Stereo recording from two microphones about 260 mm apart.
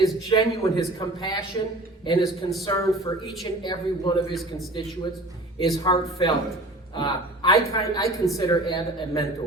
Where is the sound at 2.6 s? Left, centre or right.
Centre.